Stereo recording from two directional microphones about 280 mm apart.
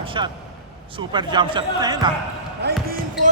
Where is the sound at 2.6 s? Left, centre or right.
Right.